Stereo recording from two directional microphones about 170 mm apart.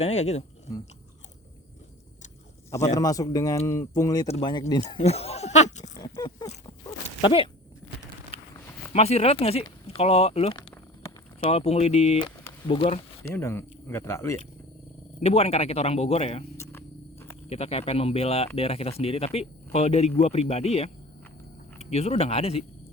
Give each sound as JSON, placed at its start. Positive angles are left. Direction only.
{"t": 0.0, "sound": "speech", "side_deg": 40}
{"t": 2.9, "sound": "speech", "side_deg": 20}
{"t": 5.9, "sound": "a sound", "side_deg": 25}
{"t": 8.9, "sound": "speech", "side_deg": 40}
{"t": 13.2, "sound": "speech", "side_deg": 15}
{"t": 15.2, "sound": "speech", "side_deg": 35}
{"t": 16.6, "sound": "a sound", "side_deg": 15}
{"t": 17.5, "sound": "speech", "side_deg": 35}